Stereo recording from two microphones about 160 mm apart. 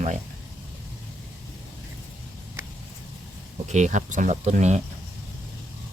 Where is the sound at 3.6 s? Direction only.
45° right (ahead or behind).